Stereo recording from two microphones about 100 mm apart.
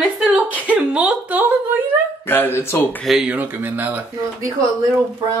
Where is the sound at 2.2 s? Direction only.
20° left (ahead or behind).